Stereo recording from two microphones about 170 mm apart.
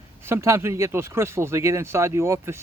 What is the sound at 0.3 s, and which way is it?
Speech, 15° right (ahead or behind).